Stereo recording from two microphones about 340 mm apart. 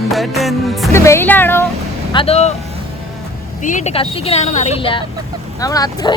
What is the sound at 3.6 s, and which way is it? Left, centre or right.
Speech, left.